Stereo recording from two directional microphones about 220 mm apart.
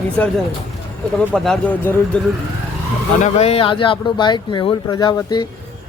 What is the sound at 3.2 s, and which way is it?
Speech, 30° left (ahead or behind).